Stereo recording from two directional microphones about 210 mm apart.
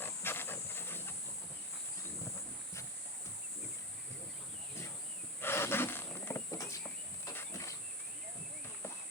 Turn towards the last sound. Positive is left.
turn(degrees=15)  # may be behind; listen again after turning